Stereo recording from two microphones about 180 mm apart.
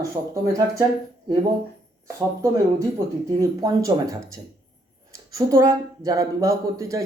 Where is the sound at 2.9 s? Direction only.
15° right (ahead or behind).